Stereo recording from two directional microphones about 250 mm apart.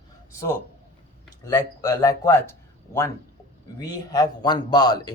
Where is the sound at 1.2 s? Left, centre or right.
Centre.